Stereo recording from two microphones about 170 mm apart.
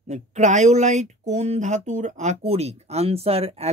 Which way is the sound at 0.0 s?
45° right (ahead or behind).